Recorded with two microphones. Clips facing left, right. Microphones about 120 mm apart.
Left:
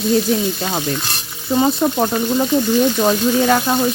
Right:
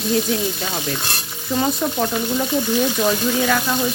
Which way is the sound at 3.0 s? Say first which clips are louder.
Left 4 dB; 35° left (ahead or behind).